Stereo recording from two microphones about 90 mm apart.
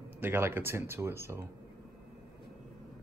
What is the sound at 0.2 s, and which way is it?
Speech, 20° right (ahead or behind).